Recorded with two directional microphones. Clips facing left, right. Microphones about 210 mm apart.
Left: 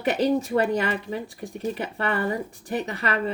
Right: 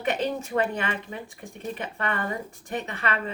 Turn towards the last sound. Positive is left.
turn(degrees=35)  # may be behind; listen again after turning